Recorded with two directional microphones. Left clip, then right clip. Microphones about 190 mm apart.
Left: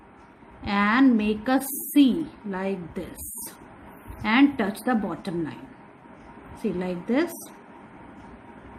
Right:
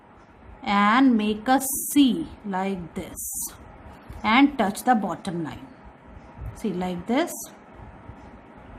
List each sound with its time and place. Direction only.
0.6 s a woman's voice: 20° right (ahead or behind)
4.2 s a woman's voice: 15° right (ahead or behind)
6.6 s a woman's voice: 20° right (ahead or behind)